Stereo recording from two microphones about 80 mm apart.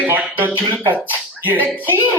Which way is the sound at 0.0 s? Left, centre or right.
Centre.